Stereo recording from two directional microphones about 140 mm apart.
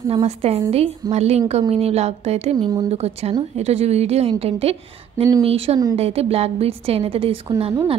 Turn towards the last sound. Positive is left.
turn(degrees=-40)  # may be behind; listen again after turning